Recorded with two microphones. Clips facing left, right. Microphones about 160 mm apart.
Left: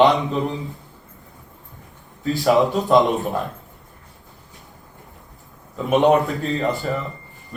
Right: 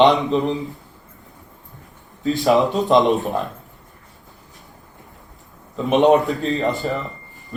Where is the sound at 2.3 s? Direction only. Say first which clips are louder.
Right 1 dB; centre (ahead or behind).